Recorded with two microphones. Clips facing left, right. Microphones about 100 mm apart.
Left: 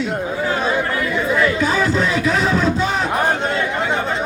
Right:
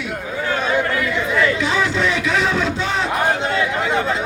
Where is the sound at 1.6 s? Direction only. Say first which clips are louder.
Left 1 dB; 40° left (ahead or behind).